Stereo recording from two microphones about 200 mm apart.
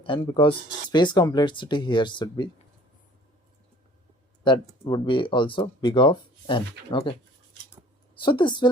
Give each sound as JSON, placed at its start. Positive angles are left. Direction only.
{"t": 0.0, "sound": "speech", "side_deg": 25}
{"t": 4.4, "sound": "speech", "side_deg": 20}
{"t": 8.1, "sound": "speech", "side_deg": 25}